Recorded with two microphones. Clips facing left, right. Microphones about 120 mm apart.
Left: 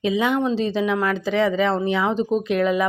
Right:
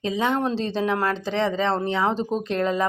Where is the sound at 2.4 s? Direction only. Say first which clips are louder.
Left 2 dB; 30° right (ahead or behind).